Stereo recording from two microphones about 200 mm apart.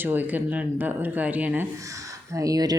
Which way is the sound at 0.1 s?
10° right (ahead or behind).